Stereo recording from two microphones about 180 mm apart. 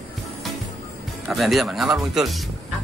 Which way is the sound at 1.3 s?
Centre (ahead or behind).